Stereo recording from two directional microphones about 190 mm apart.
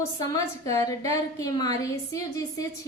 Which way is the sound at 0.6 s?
20° left (ahead or behind).